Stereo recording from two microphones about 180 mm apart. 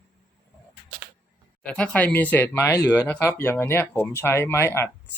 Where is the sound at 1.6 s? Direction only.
5° left (ahead or behind).